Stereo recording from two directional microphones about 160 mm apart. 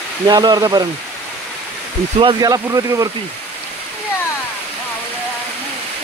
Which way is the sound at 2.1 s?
25° right (ahead or behind).